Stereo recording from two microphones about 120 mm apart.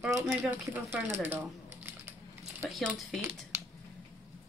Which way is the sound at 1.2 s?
20° right (ahead or behind).